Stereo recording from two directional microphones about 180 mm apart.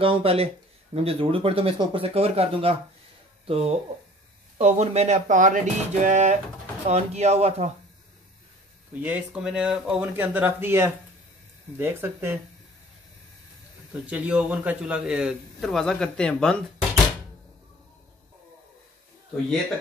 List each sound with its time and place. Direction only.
0.0 s speech: 30° right (ahead or behind)
9.0 s speech: 5° right (ahead or behind)
14.0 s a man's voice: 5° right (ahead or behind)